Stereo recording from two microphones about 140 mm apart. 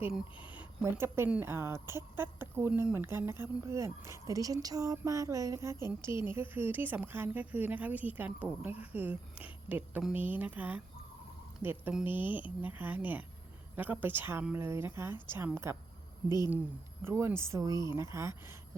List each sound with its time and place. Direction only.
0.6 s speech: 15° right (ahead or behind)
17.0 s speech: 15° right (ahead or behind)